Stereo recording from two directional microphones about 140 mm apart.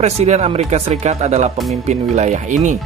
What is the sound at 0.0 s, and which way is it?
Speech, 50° right (ahead or behind).